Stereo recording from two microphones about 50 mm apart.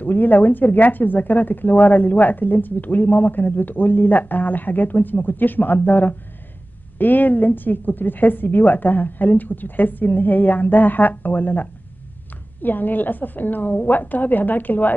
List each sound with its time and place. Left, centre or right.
0.0 s speech: left